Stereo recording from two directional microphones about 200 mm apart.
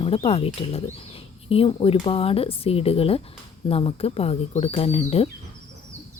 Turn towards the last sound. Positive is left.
turn(degrees=30)  # may be behind; listen again after turning